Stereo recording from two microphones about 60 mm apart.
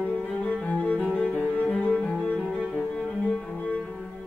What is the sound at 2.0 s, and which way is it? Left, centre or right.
Cello, centre.